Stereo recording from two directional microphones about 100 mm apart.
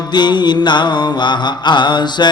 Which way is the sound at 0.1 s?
45° left (ahead or behind).